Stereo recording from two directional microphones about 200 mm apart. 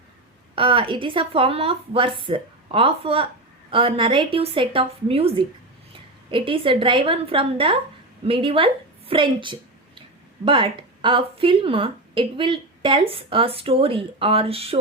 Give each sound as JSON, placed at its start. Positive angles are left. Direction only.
{"t": 0.5, "sound": "a woman's voice", "side_deg": -25}